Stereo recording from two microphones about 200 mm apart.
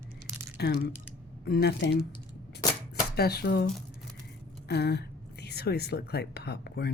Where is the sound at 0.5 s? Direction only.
50° left (ahead or behind).